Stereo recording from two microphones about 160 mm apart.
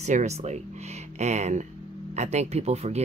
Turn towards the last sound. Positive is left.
turn(degrees=-40)  # may be behind; listen again after turning